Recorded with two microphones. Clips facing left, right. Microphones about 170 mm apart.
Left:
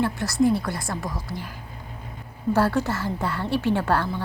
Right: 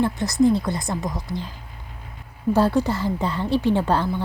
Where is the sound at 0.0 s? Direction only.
15° right (ahead or behind).